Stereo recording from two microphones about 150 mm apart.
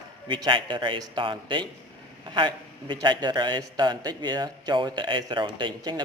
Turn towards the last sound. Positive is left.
turn(degrees=-30)  # may be behind; listen again after turning